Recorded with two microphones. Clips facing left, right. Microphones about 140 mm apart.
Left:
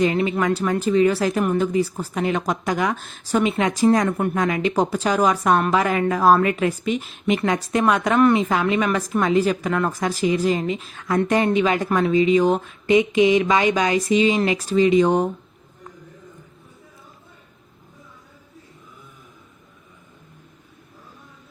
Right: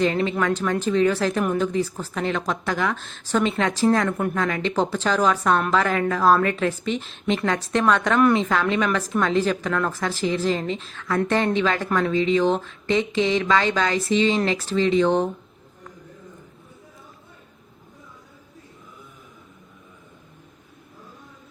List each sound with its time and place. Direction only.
0.0 s a woman's voice: 10° left (ahead or behind)